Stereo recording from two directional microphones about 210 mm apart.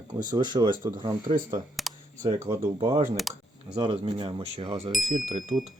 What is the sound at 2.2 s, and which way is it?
Speech, 15° right (ahead or behind).